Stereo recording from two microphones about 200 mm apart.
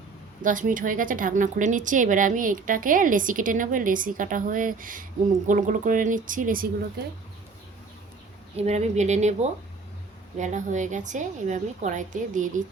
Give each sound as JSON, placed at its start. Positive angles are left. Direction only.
{"t": 0.4, "sound": "a woman's voice", "side_deg": -40}
{"t": 8.5, "sound": "a woman's voice", "side_deg": -35}